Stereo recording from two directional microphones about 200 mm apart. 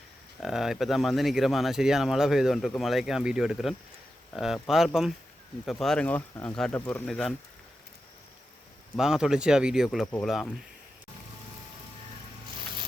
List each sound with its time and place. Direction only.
0.3 s speech: centre (ahead or behind)
9.0 s speech: centre (ahead or behind)